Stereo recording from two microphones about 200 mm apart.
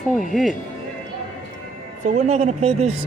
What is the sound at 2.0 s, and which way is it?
Speech, 35° right (ahead or behind).